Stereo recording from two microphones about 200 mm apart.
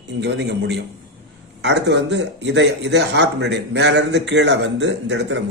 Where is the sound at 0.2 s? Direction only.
60° right (ahead or behind).